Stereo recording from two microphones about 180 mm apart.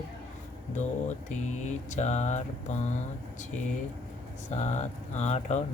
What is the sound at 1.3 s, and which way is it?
Mantra, 40° left (ahead or behind).